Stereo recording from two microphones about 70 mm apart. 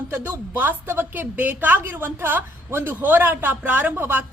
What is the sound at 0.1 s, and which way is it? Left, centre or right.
A woman's voice, right.